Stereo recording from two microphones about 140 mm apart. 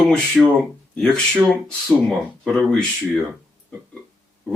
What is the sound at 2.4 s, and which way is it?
Speech, 5° left (ahead or behind).